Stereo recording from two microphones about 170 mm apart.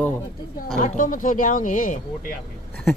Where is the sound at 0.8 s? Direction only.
50° left (ahead or behind).